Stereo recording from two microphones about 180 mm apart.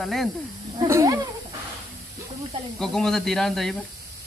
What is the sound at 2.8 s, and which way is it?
Speech, centre (ahead or behind).